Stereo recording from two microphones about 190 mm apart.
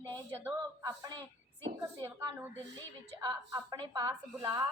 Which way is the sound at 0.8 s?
20° right (ahead or behind).